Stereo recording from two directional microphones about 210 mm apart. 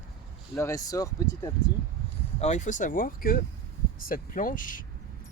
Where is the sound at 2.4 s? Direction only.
35° left (ahead or behind).